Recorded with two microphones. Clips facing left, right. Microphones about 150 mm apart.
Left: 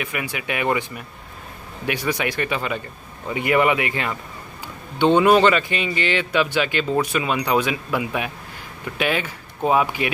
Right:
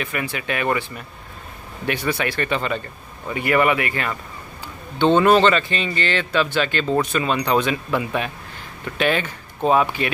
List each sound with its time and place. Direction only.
0.0 s speech: 10° left (ahead or behind)